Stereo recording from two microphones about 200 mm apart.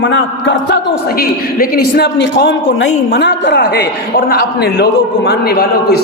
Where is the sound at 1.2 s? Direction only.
50° left (ahead or behind).